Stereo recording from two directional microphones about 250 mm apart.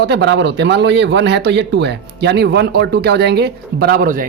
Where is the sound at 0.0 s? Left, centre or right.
Right.